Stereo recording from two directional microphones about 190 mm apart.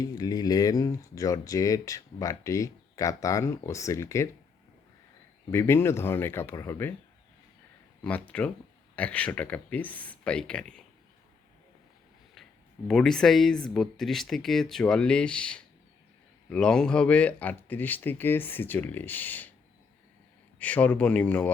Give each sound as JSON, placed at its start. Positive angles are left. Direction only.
{"t": 0.0, "sound": "speech", "side_deg": 20}
{"t": 5.5, "sound": "speech", "side_deg": 15}
{"t": 8.0, "sound": "speech", "side_deg": 5}
{"t": 12.9, "sound": "speech", "side_deg": 5}
{"t": 20.6, "sound": "speech", "side_deg": 5}